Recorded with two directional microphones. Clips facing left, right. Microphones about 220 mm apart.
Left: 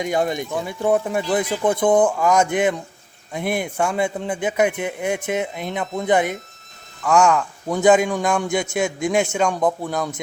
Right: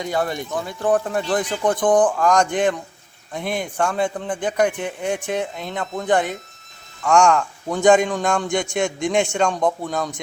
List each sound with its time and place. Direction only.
0.0 s a man's voice: 20° left (ahead or behind)